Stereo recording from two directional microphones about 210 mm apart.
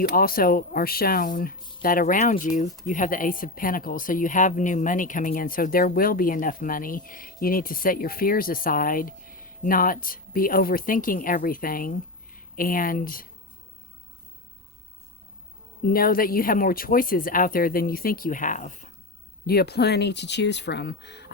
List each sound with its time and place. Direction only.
0.2 s speech: 45° left (ahead or behind)
15.8 s speech: 45° left (ahead or behind)
19.5 s speech: 50° left (ahead or behind)